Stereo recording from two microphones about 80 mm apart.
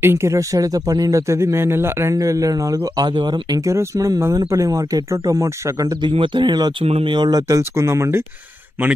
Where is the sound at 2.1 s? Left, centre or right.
Right.